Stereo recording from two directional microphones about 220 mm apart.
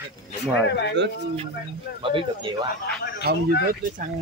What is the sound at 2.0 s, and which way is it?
Speech, 25° right (ahead or behind).